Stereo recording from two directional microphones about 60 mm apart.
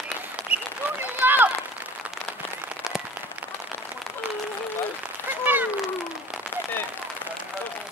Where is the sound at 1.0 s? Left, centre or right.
Right.